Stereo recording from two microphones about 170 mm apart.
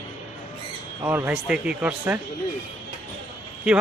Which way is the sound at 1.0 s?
10° right (ahead or behind).